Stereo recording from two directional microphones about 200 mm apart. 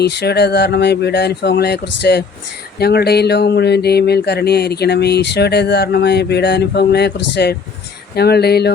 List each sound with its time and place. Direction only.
0.0 s speech: 55° left (ahead or behind)